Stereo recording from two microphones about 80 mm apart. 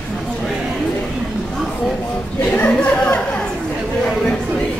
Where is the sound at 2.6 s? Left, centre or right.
Centre.